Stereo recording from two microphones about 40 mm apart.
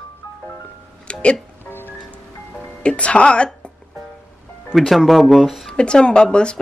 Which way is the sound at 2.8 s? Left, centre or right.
Left.